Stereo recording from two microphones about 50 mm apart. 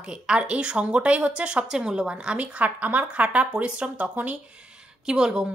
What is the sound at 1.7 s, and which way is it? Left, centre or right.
A woman's voice, centre.